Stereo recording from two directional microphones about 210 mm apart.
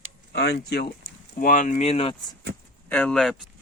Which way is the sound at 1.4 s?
40° left (ahead or behind).